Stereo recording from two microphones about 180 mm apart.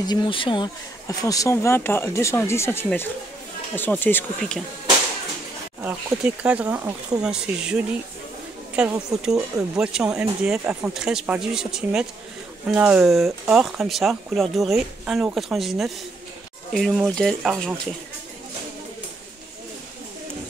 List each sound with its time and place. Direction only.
0.0 s speech: 25° left (ahead or behind); by 4.6 s 5° left (ahead or behind)
5.8 s speech: 10° right (ahead or behind)